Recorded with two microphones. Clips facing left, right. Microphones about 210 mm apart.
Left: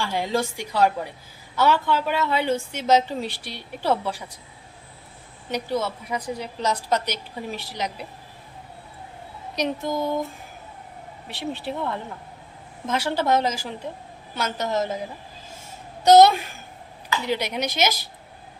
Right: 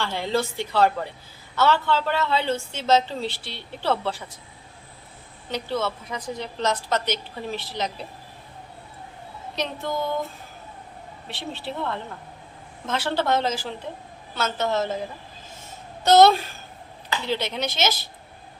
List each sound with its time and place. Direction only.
0.0 s a woman's voice: 10° left (ahead or behind)
5.5 s a woman's voice: 10° left (ahead or behind)
9.6 s a woman's voice: 10° left (ahead or behind)
11.3 s a woman's voice: 10° left (ahead or behind)
12.9 s a woman's voice: 10° left (ahead or behind)
16.0 s a woman's voice: 10° left (ahead or behind)